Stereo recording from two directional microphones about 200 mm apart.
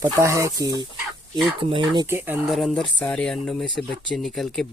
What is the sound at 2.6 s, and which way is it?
Speech, centre (ahead or behind).